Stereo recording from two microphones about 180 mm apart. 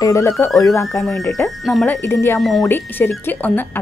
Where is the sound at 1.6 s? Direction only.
Centre (ahead or behind).